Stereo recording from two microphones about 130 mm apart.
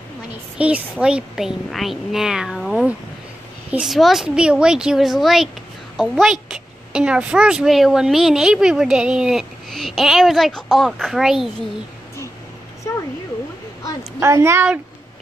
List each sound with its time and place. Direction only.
0.6 s a woman's voice: 10° right (ahead or behind)
14.2 s a woman's voice: 20° right (ahead or behind)